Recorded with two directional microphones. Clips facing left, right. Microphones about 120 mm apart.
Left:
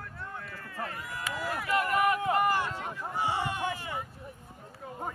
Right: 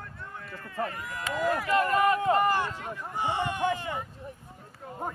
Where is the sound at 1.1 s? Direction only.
45° right (ahead or behind).